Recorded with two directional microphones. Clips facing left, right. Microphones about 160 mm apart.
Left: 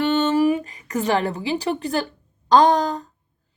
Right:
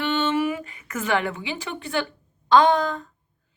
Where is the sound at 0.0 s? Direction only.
40° left (ahead or behind).